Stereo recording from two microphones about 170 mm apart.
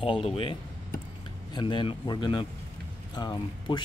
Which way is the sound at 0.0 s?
35° left (ahead or behind).